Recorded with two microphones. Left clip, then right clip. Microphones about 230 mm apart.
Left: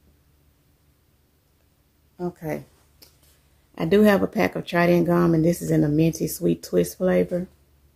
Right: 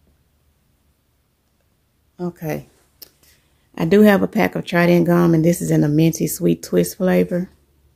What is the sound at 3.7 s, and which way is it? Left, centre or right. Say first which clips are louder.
Speech: right 4 dB; right.